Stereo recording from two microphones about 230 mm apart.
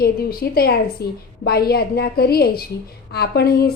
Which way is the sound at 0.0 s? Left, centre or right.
Left.